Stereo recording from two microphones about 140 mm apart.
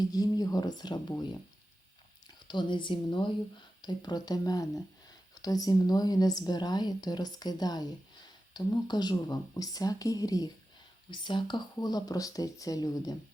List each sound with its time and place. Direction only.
0.1 s speech: 25° left (ahead or behind)
2.2 s speech: 35° left (ahead or behind)